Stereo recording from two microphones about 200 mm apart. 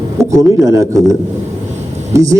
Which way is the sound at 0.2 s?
15° right (ahead or behind).